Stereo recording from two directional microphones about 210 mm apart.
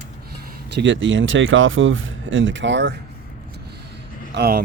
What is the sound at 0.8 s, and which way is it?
Speech, 60° right (ahead or behind).